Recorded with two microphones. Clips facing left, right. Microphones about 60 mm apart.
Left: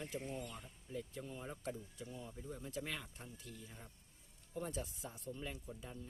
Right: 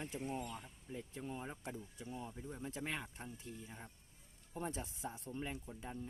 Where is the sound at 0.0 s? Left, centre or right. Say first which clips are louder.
Right 2 dB; right.